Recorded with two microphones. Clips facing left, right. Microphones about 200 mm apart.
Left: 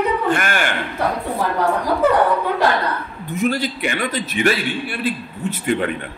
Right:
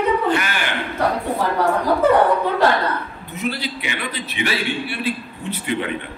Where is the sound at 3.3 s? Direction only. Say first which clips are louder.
Left 5 dB; 45° left (ahead or behind).